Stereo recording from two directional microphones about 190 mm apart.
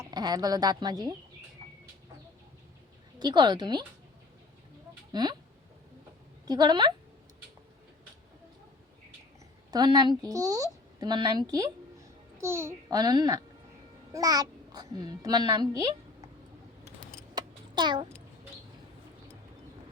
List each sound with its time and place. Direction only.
0.0 s speech: 20° right (ahead or behind)
3.2 s speech: 20° right (ahead or behind)
5.1 s speech: 20° right (ahead or behind)
6.5 s speech: 20° right (ahead or behind)
9.7 s a child's voice: 20° right (ahead or behind)
17.3 s a sound: 25° right (ahead or behind)